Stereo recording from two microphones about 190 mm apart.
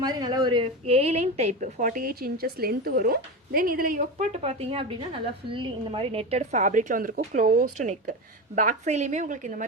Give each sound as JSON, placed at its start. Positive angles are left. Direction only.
{"t": 0.0, "sound": "a woman's voice", "side_deg": -20}